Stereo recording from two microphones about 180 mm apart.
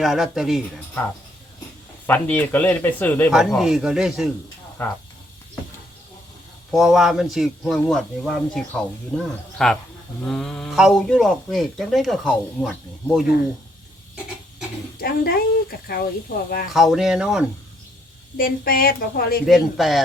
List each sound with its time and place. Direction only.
0.0 s speech: centre (ahead or behind)
2.0 s speech: 10° left (ahead or behind)
3.3 s speech: centre (ahead or behind)
4.8 s speech: 10° left (ahead or behind)
6.7 s speech: centre (ahead or behind)
14.9 s a sound: 55° left (ahead or behind)
16.7 s speech: centre (ahead or behind)
18.3 s a sound: 55° left (ahead or behind)
19.5 s speech: centre (ahead or behind)